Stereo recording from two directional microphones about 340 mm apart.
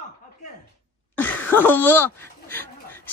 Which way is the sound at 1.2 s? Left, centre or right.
Centre.